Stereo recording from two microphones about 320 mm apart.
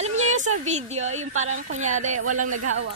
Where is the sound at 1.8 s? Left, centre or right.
Right.